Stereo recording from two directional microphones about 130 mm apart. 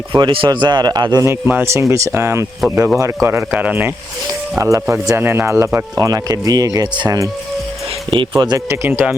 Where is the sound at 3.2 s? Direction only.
15° right (ahead or behind).